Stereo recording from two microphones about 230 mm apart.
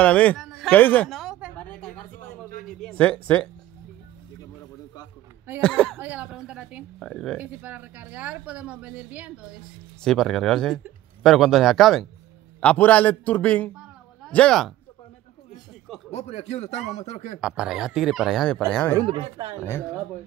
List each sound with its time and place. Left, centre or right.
0.0 s a sound: centre
2.7 s speech: centre
5.6 s speech: centre
5.9 s a man's voice: centre
13.7 s a sound: centre
16.1 s speech: left
17.4 s a man's voice: centre
19.0 s speech: right
19.6 s a man's voice: centre